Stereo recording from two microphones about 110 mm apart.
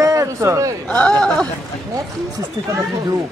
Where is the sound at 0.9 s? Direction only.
10° left (ahead or behind).